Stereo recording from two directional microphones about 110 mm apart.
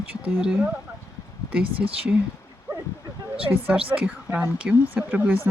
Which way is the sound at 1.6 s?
55° right (ahead or behind).